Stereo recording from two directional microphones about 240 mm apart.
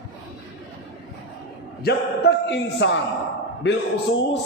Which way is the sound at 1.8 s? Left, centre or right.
Left.